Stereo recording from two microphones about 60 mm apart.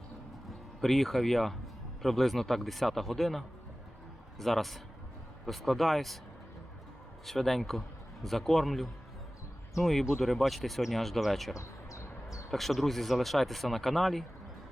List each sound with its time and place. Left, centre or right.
0.8 s speech: centre
7.3 s speech: centre
11.5 s a sound: left
12.5 s speech: centre